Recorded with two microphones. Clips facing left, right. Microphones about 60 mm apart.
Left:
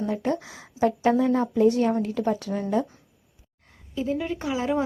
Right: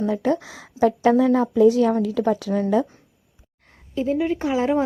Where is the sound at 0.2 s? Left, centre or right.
Right.